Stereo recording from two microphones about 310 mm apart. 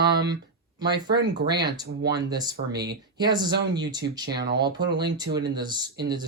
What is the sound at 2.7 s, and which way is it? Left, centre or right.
Speech, right.